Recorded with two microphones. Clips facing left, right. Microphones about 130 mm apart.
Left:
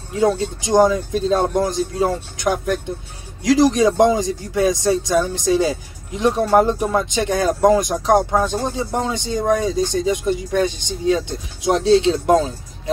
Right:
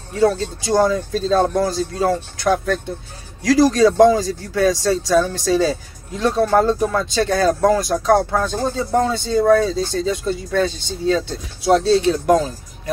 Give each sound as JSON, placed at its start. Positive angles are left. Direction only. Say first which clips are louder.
{"t": 0.2, "sound": "speech", "louder": "right 1 dB", "side_deg": 15}